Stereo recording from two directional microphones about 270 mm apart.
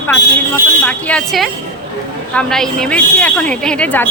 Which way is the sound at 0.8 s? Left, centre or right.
Centre.